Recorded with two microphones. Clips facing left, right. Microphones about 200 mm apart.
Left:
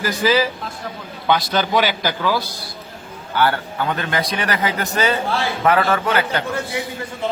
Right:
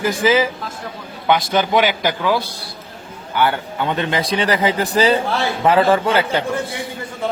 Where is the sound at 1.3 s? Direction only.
15° right (ahead or behind).